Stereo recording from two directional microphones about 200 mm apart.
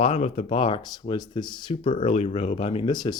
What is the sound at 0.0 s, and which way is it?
Speech, 30° left (ahead or behind).